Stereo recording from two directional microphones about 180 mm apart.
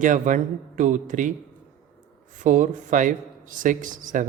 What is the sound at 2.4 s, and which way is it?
Speech, 45° right (ahead or behind).